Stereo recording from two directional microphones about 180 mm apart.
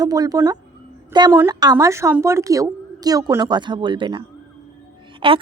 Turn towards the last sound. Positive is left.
turn(degrees=-30)  # may be behind; listen again after turning